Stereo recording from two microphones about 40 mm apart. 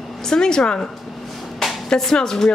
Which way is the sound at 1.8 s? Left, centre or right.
Centre.